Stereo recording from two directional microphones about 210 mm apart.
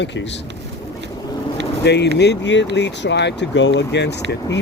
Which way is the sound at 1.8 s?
55° left (ahead or behind).